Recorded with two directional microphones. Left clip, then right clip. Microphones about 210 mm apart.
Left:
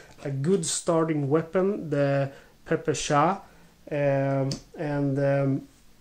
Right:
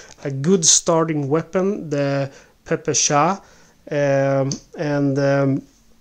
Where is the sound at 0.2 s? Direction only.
45° right (ahead or behind); by 3.3 s 30° right (ahead or behind).